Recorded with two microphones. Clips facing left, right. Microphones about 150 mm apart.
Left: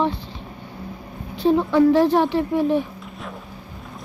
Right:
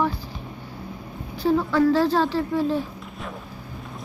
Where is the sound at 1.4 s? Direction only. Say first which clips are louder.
Left 4 dB; 20° left (ahead or behind).